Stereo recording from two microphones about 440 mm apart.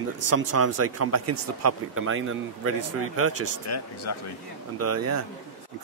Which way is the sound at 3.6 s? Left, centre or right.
Left.